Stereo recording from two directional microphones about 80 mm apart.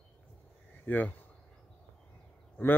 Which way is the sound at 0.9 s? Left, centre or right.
Left.